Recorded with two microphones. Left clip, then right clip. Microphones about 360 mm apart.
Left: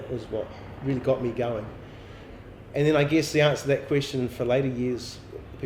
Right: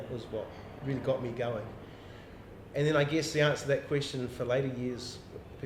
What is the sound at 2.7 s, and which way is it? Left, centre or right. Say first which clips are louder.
Speech: left 6 dB; left.